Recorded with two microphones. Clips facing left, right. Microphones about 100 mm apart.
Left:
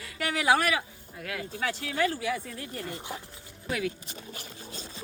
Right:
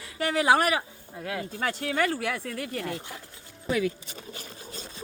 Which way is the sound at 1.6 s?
50° right (ahead or behind).